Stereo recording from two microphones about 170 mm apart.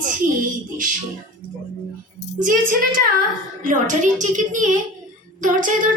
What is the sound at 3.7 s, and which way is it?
Female singing, 50° right (ahead or behind).